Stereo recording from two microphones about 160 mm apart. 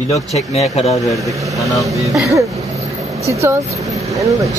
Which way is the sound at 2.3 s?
20° right (ahead or behind).